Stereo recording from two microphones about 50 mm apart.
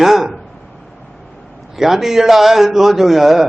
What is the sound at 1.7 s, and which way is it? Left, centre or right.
A man's voice, centre.